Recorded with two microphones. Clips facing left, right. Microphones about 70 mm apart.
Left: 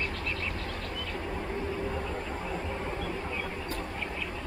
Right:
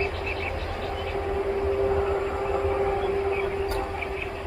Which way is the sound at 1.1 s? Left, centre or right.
Right.